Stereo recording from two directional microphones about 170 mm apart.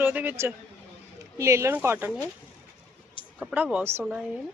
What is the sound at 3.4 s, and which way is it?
Speech, 5° right (ahead or behind).